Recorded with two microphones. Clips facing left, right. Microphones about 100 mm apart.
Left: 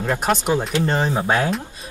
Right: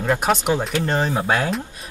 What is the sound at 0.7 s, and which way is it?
Speech, 15° left (ahead or behind).